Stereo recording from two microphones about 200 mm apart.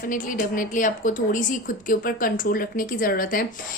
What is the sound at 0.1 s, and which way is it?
A woman's voice, 40° left (ahead or behind).